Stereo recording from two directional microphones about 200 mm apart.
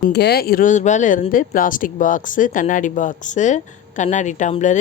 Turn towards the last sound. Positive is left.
turn(degrees=40)  # may be behind; listen again after turning